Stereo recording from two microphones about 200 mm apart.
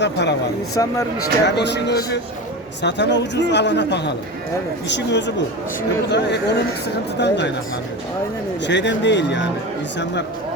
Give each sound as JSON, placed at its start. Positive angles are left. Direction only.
{"t": 0.0, "sound": "a man's voice", "side_deg": 60}
{"t": 0.8, "sound": "speech", "side_deg": 15}
{"t": 1.2, "sound": "a man's voice", "side_deg": 60}
{"t": 8.6, "sound": "a man's voice", "side_deg": 60}